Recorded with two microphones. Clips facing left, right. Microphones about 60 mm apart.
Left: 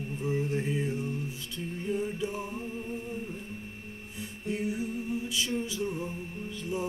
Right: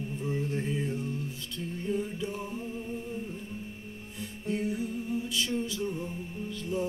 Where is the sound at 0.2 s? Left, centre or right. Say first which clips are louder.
Left 3 dB; centre.